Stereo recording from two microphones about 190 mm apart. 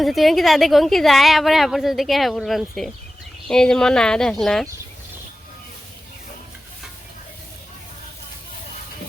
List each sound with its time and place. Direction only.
0.0 s a woman's voice: centre (ahead or behind)